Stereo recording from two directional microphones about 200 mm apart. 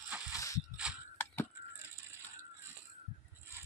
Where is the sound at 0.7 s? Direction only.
5° right (ahead or behind).